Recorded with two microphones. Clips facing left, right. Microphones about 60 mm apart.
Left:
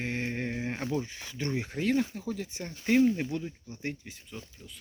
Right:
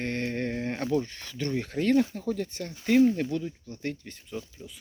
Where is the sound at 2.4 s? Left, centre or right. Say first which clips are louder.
Right 2 dB; centre.